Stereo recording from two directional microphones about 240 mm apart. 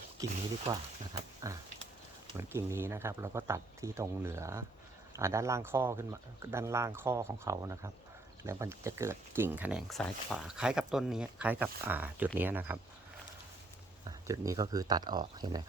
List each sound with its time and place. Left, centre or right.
0.2 s speech: centre
1.4 s speech: centre
14.0 s speech: centre